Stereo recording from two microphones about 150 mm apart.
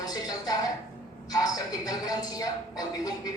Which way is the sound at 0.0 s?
25° left (ahead or behind).